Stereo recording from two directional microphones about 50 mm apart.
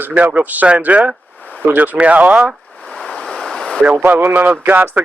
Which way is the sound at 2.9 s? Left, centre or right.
Centre.